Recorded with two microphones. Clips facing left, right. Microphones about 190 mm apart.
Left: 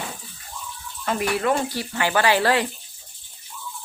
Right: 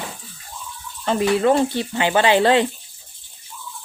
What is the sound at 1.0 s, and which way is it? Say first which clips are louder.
Speech: right 6 dB; 25° right (ahead or behind).